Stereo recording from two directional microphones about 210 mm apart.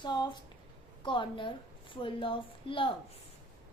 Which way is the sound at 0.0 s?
20° left (ahead or behind).